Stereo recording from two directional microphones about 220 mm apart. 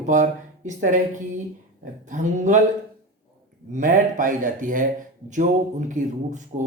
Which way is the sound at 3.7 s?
35° right (ahead or behind).